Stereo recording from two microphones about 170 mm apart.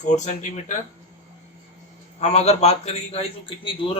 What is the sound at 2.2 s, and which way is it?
A man's voice, 40° left (ahead or behind).